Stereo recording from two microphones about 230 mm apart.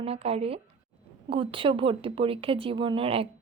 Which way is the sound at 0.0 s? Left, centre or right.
Right.